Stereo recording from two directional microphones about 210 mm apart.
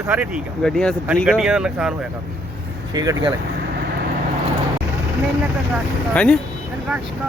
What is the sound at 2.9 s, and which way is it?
Speech, 20° right (ahead or behind).